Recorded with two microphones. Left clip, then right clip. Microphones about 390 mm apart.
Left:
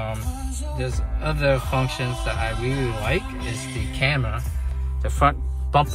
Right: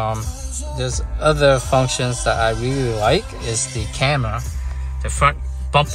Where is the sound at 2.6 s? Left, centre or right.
Right.